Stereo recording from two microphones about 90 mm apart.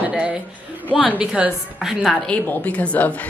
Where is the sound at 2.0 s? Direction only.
5° left (ahead or behind).